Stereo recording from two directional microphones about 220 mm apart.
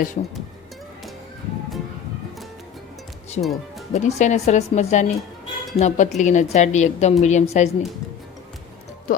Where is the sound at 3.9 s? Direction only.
30° left (ahead or behind).